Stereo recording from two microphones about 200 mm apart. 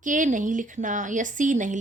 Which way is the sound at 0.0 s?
40° right (ahead or behind).